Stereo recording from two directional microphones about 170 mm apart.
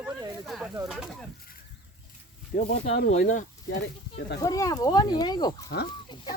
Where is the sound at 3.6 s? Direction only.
90° left.